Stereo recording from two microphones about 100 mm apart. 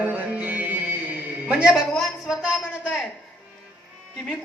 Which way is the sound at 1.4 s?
10° right (ahead or behind).